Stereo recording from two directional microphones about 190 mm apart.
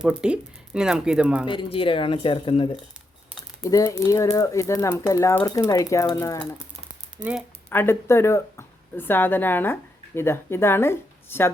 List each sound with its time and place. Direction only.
0.0 s speech: 5° right (ahead or behind)
1.5 s speech: 25° left (ahead or behind)
7.2 s speech: 5° right (ahead or behind)
7.7 s speech: 10° left (ahead or behind)